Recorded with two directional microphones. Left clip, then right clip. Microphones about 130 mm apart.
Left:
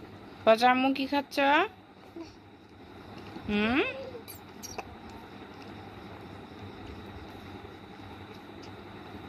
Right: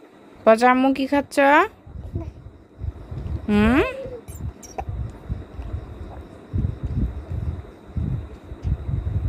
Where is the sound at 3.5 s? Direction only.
90° right.